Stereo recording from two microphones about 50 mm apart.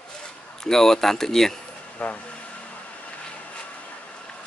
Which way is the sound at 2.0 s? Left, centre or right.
Left.